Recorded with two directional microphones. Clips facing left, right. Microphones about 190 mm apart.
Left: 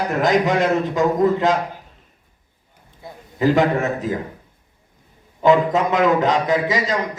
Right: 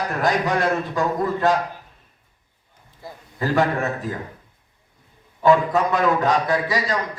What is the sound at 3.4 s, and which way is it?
Speech, 20° left (ahead or behind).